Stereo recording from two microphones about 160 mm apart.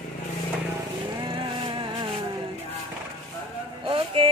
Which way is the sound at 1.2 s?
30° right (ahead or behind).